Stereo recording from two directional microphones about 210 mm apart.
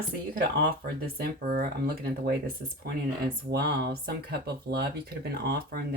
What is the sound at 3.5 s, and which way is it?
Speech, 50° right (ahead or behind).